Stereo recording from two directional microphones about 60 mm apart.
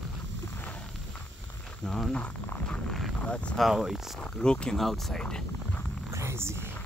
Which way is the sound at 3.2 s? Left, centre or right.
Left.